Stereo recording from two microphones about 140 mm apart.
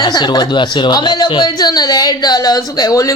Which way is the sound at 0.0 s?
30° left (ahead or behind).